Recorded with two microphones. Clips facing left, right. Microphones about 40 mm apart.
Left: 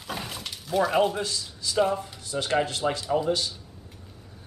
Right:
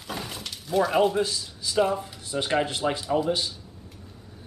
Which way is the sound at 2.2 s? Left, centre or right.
Centre.